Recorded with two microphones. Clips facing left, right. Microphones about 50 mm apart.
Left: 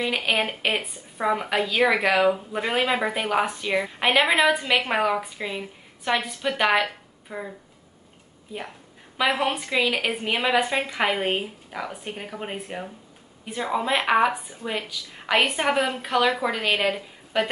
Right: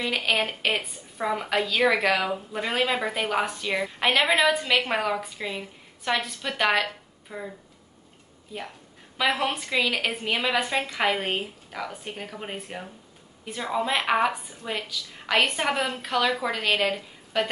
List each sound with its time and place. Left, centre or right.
0.0 s a woman's voice: centre